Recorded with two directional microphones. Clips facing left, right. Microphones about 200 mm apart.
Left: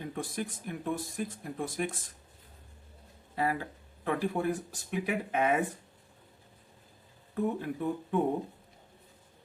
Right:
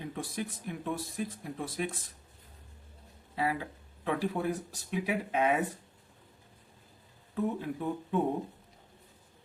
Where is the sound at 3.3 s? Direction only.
45° left (ahead or behind).